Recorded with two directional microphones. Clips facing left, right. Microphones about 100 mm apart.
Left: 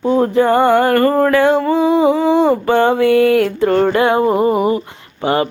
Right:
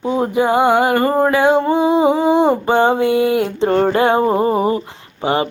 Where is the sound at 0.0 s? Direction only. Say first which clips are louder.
Left 3 dB; 15° right (ahead or behind).